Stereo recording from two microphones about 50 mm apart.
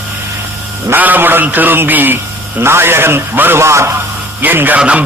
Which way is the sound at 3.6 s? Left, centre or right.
Right.